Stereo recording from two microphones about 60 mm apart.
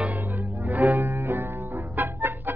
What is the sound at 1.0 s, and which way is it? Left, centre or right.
Music, right.